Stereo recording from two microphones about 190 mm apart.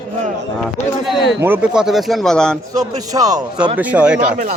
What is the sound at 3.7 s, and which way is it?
Speech, 10° right (ahead or behind).